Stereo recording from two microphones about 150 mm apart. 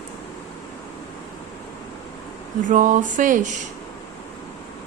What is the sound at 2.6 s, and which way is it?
Speech, 60° right (ahead or behind).